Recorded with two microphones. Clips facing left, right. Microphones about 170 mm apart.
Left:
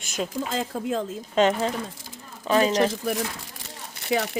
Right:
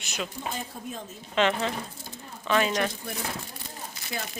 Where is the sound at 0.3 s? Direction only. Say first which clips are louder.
Left 8 dB; 90° left.